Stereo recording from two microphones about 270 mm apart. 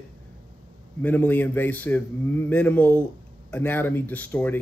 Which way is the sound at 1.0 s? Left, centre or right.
Centre.